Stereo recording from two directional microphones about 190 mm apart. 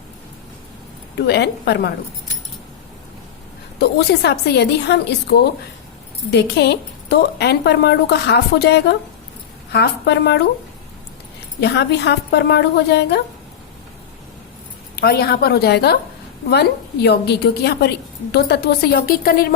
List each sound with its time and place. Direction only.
1.3 s a woman's voice: 60° left (ahead or behind)
3.8 s a woman's voice: 55° left (ahead or behind)
11.6 s a woman's voice: 60° left (ahead or behind)
14.9 s a woman's voice: 55° left (ahead or behind)